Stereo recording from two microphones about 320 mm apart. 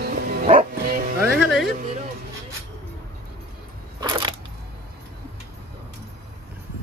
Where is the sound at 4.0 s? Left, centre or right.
Centre.